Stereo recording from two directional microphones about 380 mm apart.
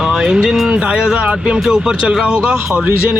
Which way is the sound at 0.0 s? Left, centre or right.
Centre.